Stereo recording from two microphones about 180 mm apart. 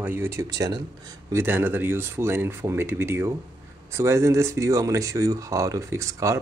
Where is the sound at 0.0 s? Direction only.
15° right (ahead or behind).